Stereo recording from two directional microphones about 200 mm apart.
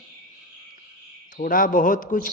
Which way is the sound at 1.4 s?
45° left (ahead or behind).